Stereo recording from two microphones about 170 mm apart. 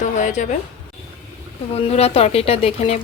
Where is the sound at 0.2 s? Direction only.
45° left (ahead or behind).